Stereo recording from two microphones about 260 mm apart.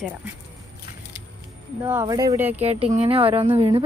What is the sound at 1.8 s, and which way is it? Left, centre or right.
Speech, centre.